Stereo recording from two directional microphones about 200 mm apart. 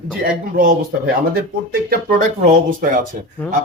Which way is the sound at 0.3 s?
45° right (ahead or behind).